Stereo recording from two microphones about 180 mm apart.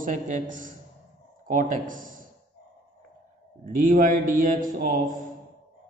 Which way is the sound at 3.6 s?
50° right (ahead or behind).